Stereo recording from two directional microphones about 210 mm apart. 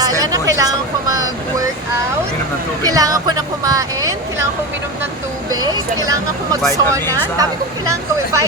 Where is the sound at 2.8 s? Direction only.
15° right (ahead or behind).